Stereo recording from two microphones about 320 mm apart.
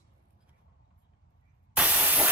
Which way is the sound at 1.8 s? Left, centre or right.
Centre.